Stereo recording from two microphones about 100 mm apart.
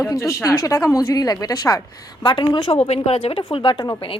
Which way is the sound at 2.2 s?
55° left (ahead or behind).